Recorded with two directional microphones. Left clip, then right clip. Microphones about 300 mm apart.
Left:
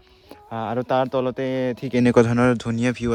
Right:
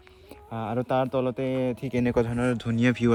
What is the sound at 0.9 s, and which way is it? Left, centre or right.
Speech, centre.